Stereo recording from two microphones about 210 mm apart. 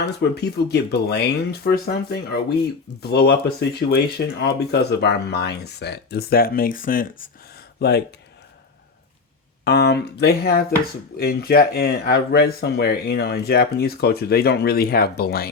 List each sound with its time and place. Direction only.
0.0 s speech: 50° left (ahead or behind)
7.8 s speech: 50° left (ahead or behind)
9.6 s speech: 50° left (ahead or behind)